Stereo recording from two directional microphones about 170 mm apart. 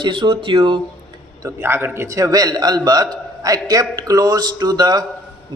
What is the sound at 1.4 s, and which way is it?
A man's voice, 15° right (ahead or behind).